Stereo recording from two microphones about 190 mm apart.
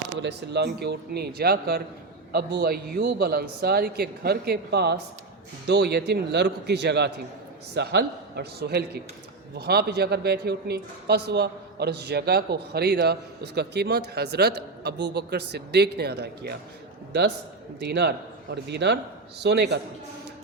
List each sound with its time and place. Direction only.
0.2 s a man's voice: 65° right (ahead or behind)